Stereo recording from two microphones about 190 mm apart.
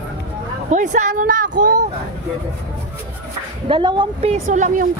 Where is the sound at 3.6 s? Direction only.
25° right (ahead or behind); by 4.8 s 40° right (ahead or behind).